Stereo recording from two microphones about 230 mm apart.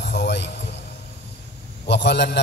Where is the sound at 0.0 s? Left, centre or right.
Left.